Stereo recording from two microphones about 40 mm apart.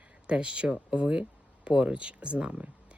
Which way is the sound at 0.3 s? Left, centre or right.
Right.